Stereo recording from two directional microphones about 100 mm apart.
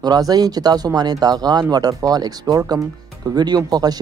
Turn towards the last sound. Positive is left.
turn(degrees=-40)  # may be behind; listen again after turning